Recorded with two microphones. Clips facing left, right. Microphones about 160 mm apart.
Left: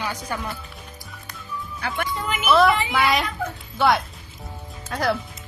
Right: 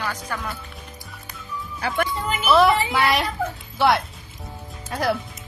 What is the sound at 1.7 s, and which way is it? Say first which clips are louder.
Music: right 4 dB; 35° right (ahead or behind).